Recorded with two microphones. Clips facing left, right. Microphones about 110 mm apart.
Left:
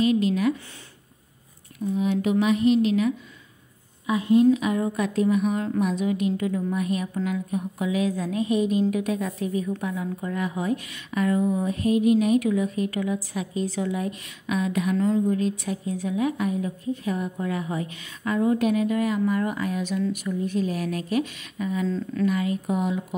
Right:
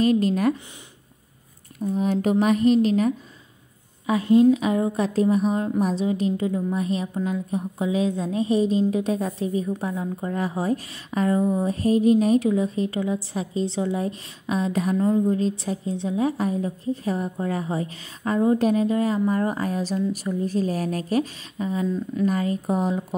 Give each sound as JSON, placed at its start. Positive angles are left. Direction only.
{"t": 0.0, "sound": "a woman's voice", "side_deg": -40}
{"t": 1.8, "sound": "a woman's voice", "side_deg": -40}
{"t": 21.8, "sound": "speech", "side_deg": -15}
{"t": 22.2, "sound": "a woman's voice", "side_deg": -35}